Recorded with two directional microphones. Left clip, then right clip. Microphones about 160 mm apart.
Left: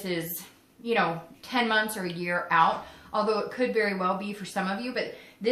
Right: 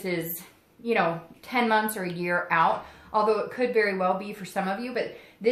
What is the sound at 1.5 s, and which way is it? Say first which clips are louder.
A woman's voice: right 2 dB; 50° right (ahead or behind).